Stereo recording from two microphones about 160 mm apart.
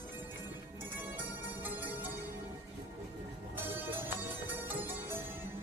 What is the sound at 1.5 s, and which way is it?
Music, 10° right (ahead or behind).